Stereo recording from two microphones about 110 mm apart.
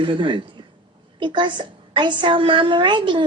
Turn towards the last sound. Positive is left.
turn(degrees=-45)  # may be behind; listen again after turning